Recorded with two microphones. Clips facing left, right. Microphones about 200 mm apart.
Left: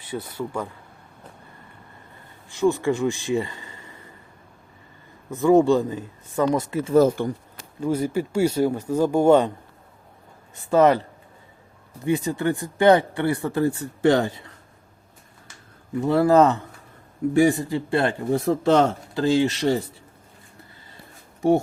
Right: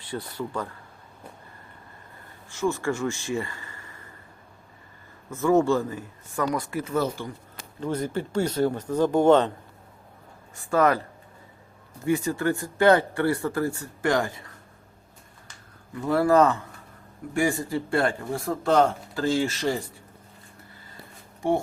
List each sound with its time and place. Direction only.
0.1 s speech: 10° left (ahead or behind)
2.5 s speech: 15° left (ahead or behind)
5.3 s speech: 15° left (ahead or behind)
7.2 s speech: 55° left (ahead or behind)
7.8 s speech: 10° left (ahead or behind)
10.5 s speech: 20° left (ahead or behind)
12.0 s speech: 20° left (ahead or behind)
16.0 s speech: 20° left (ahead or behind)